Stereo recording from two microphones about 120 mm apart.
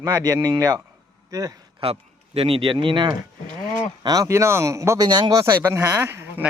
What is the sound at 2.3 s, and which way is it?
Speech, 50° right (ahead or behind).